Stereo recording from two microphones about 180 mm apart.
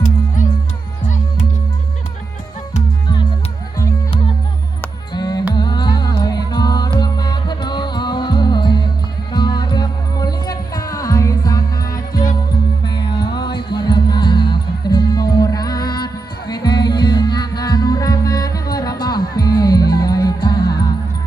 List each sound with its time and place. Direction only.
1.0 s music: 45° left (ahead or behind)
3.8 s music: 25° left (ahead or behind)